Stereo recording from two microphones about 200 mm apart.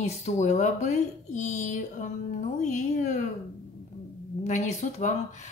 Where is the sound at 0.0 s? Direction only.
35° left (ahead or behind).